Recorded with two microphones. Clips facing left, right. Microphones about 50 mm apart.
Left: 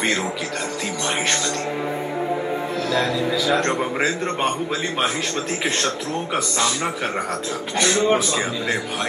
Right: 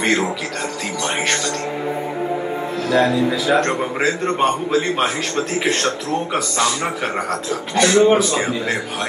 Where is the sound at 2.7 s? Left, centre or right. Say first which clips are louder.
Right 7 dB; right.